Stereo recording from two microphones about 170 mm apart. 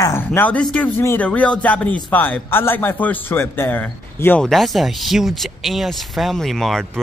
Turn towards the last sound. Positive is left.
turn(degrees=0)  # may be behind; listen again after turning